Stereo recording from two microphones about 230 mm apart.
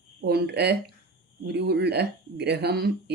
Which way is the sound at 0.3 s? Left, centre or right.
Right.